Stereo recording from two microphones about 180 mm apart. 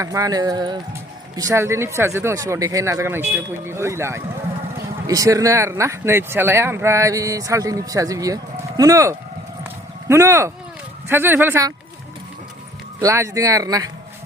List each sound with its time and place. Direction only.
0.0 s speech: 20° right (ahead or behind)
9.6 s clip-clop: 15° right (ahead or behind)
11.1 s speech: 10° right (ahead or behind)
13.0 s speech: 15° right (ahead or behind)